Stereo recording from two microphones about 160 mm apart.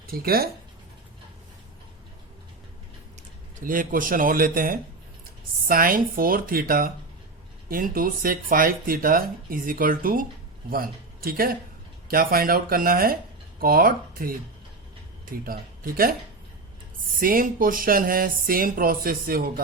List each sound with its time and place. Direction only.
0.1 s speech: 70° right (ahead or behind)
3.6 s a man's voice: 60° right (ahead or behind)
17.2 s speech: 60° right (ahead or behind)